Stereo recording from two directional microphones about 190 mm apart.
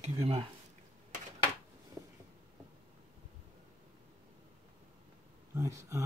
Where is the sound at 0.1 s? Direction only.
25° right (ahead or behind).